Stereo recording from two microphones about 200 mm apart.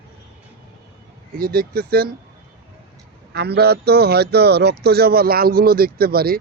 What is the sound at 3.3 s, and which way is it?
A man's voice, 55° right (ahead or behind).